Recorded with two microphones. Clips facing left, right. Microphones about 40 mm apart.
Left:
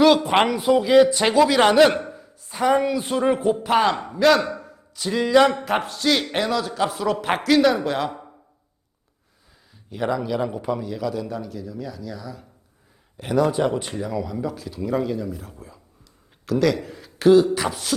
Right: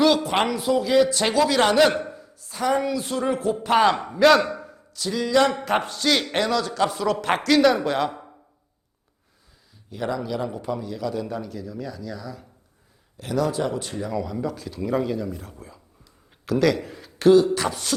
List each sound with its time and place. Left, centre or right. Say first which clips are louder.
0.1 s a man's voice: left 4 dB; centre
2.0 s a sound: even; centre
2.5 s a man's voice: left 3 dB; centre
3.6 s a man's voice: right 1 dB; centre
4.9 s speech: left 4 dB; left
5.4 s a man's voice: left 1 dB; centre
9.9 s a man's voice: left 3 dB; centre
13.1 s speech: left 4 dB; centre
13.9 s a man's voice: left 1 dB; centre